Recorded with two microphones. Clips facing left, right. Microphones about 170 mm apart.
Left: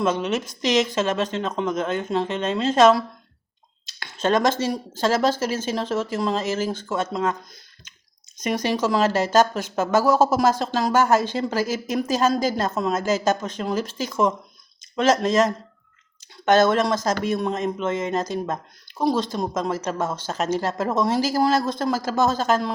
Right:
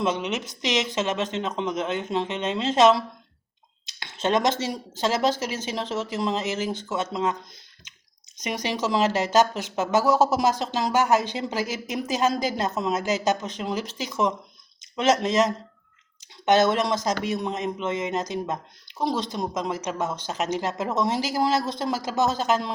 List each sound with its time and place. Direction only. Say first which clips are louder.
0.0 s speech: left 3 dB; 20° right (ahead or behind)
3.8 s a sound: left 3 dB; 20° right (ahead or behind)
4.9 s speech: left 2 dB; 20° right (ahead or behind)
8.4 s speech: left 5 dB; 15° right (ahead or behind)